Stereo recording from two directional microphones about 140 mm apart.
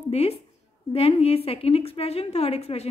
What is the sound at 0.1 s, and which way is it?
A woman's voice, 50° left (ahead or behind).